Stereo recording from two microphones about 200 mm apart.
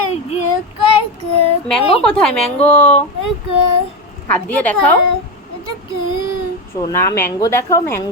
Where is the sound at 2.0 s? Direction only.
5° left (ahead or behind).